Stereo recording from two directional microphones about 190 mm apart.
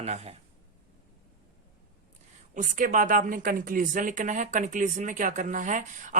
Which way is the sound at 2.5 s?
45° right (ahead or behind).